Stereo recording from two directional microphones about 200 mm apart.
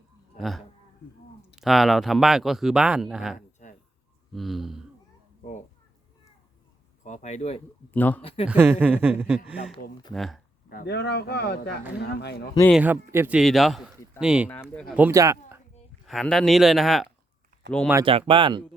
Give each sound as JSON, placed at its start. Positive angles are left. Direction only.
{"t": 0.3, "sound": "speech", "side_deg": 0}
{"t": 3.3, "sound": "a sound", "side_deg": 40}
{"t": 4.3, "sound": "speech", "side_deg": 0}
{"t": 7.0, "sound": "speech", "side_deg": 35}
{"t": 7.9, "sound": "speech", "side_deg": 10}
{"t": 8.2, "sound": "speech", "side_deg": 25}
{"t": 8.4, "sound": "speech", "side_deg": -10}
{"t": 10.7, "sound": "speech", "side_deg": 50}
{"t": 12.7, "sound": "speech", "side_deg": -10}
{"t": 14.5, "sound": "speech", "side_deg": 5}
{"t": 14.9, "sound": "speech", "side_deg": -10}
{"t": 16.0, "sound": "speech", "side_deg": 0}
{"t": 17.6, "sound": "speech", "side_deg": -60}
{"t": 18.0, "sound": "speech", "side_deg": -25}